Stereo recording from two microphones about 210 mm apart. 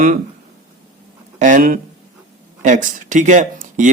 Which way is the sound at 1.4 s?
40° right (ahead or behind).